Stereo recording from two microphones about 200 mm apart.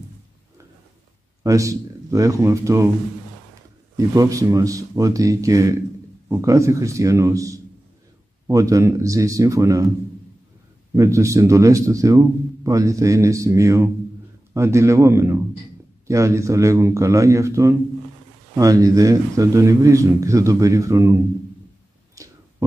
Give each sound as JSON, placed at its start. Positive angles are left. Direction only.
{"t": 1.4, "sound": "speech", "side_deg": -15}
{"t": 3.9, "sound": "speech", "side_deg": -15}
{"t": 11.0, "sound": "speech", "side_deg": -15}
{"t": 22.2, "sound": "a sound", "side_deg": -15}